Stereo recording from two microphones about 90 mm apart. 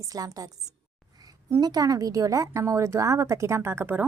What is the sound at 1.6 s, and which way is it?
A woman's voice, 45° right (ahead or behind).